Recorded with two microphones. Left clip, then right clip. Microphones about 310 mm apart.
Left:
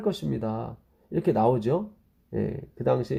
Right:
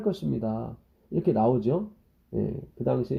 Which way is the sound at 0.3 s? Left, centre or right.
Left.